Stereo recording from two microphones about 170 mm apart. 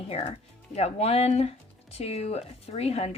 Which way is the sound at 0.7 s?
40° left (ahead or behind).